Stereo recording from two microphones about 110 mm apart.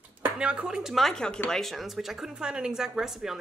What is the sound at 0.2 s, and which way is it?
Speech, 10° right (ahead or behind).